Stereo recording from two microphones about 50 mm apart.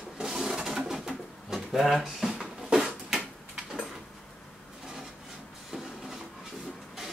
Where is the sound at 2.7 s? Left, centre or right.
Centre.